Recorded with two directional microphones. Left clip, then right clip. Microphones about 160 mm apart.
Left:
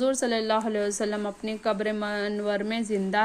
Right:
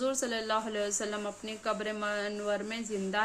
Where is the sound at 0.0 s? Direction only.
40° left (ahead or behind).